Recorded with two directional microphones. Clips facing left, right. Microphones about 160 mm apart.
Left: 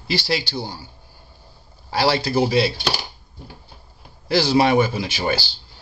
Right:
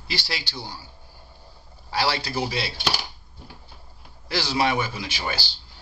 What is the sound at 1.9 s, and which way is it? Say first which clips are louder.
Speech: left 7 dB; 30° left (ahead or behind).